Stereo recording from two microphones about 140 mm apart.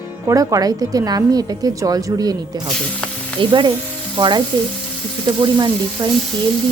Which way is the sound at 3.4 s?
35° right (ahead or behind).